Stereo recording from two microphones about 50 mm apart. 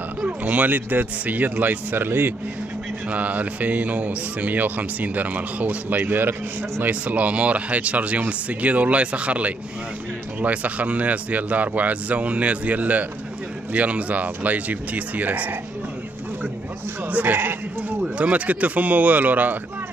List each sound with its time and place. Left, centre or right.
0.4 s speech: right
3.1 s speech: right
17.1 s speech: right
18.1 s speech: right